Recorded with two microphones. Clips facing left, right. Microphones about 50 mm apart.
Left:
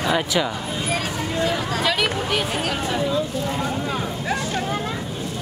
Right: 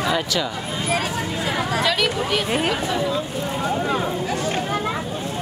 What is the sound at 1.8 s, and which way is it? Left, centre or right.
Speech, centre.